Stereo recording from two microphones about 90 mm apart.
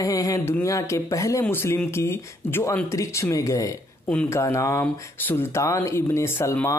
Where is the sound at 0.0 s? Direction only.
40° left (ahead or behind).